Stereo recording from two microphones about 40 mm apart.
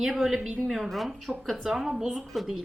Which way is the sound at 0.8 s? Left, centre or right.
Centre.